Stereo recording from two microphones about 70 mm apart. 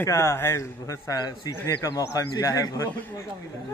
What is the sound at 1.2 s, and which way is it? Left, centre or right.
Speech, left.